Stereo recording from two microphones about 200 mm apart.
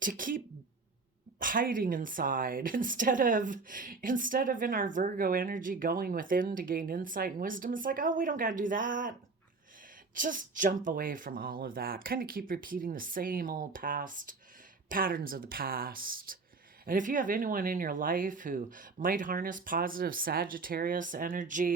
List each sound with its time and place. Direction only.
0.0 s speech: 45° right (ahead or behind)
10.2 s speech: 40° right (ahead or behind)